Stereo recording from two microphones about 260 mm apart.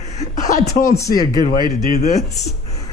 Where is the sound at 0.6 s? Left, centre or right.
Centre.